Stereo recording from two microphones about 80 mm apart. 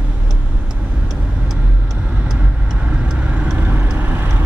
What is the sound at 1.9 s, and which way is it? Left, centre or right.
Vehicle, centre.